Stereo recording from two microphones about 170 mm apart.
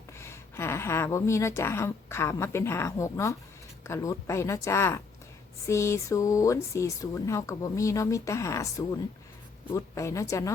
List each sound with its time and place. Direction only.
0.2 s a woman's voice: 15° left (ahead or behind)